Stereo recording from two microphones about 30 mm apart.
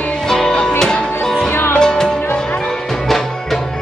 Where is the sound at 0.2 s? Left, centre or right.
Centre.